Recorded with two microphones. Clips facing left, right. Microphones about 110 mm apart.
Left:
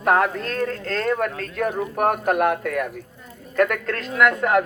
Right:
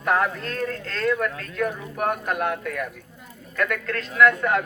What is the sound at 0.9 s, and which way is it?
Speech, 45° left (ahead or behind).